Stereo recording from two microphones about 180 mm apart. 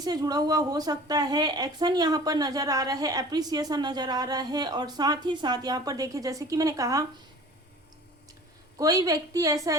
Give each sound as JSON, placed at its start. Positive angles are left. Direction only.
{"t": 0.0, "sound": "a woman's voice", "side_deg": -20}
{"t": 8.8, "sound": "a woman's voice", "side_deg": -20}